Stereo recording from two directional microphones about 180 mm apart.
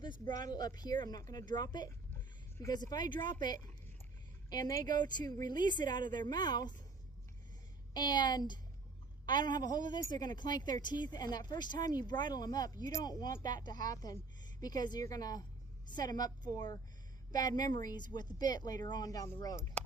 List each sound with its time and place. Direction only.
0.4 s speech: 20° left (ahead or behind)
7.9 s speech: 25° left (ahead or behind)